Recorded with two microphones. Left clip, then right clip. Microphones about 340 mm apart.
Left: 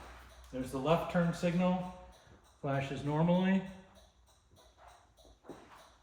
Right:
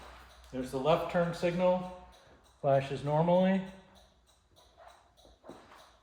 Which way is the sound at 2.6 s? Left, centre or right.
Right.